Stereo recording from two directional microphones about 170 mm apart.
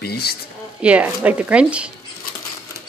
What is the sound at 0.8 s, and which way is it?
Speech, 10° right (ahead or behind).